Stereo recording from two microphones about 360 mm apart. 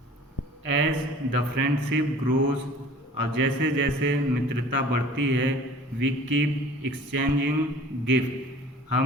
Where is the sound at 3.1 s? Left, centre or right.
Right.